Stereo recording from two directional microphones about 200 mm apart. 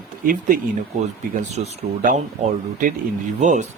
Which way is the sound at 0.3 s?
45° right (ahead or behind).